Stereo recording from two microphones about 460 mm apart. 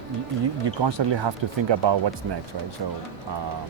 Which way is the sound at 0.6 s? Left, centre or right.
Right.